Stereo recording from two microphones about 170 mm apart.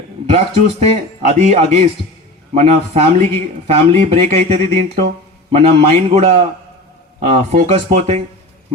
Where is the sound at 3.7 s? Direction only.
35° right (ahead or behind).